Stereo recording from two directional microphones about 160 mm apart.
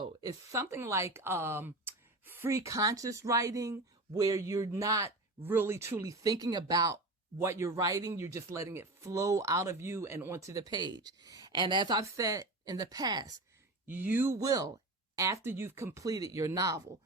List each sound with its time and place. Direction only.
0.0 s speech: 25° right (ahead or behind)
13.8 s speech: 10° right (ahead or behind)